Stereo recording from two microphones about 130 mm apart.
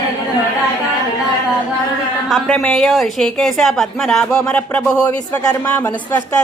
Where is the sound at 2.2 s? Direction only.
5° right (ahead or behind).